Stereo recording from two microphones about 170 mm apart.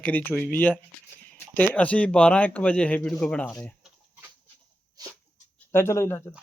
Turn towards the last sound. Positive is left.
turn(degrees=15)  # may be behind; listen again after turning